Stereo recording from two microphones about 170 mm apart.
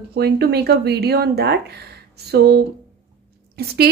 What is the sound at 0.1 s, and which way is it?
A woman's voice, 70° right (ahead or behind).